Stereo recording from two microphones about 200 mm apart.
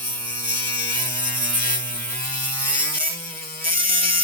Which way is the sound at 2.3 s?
10° left (ahead or behind).